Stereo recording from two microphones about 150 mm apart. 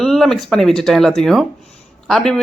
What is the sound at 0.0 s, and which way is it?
Speech, centre (ahead or behind).